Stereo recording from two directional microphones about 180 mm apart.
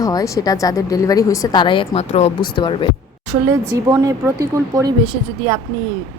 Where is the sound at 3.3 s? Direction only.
15° right (ahead or behind).